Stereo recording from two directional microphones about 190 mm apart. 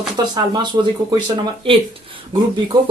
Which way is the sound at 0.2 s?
20° right (ahead or behind).